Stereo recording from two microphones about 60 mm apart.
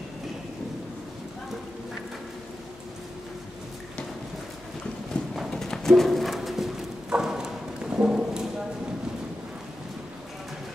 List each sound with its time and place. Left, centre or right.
5.5 s clip-clop: centre